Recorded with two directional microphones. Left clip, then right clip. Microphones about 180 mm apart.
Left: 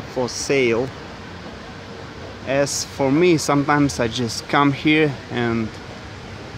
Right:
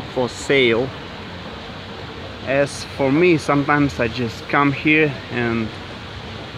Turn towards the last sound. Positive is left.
turn(degrees=25)  # may be behind; listen again after turning